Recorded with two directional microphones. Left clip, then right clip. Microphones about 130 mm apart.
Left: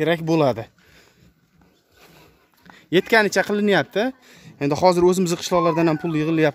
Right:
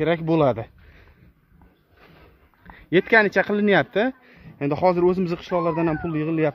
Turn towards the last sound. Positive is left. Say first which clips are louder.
# left 3 dB
turn(degrees=45)  # may be behind; listen again after turning